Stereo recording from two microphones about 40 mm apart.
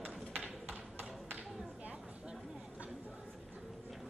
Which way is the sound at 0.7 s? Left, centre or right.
Right.